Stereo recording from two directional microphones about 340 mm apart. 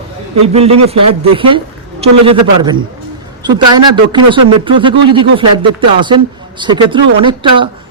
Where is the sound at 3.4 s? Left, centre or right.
Centre.